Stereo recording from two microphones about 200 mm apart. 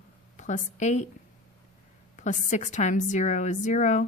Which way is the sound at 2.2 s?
35° left (ahead or behind).